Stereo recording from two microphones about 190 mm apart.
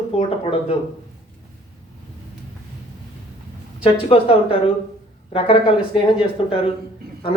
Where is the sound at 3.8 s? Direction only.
30° left (ahead or behind).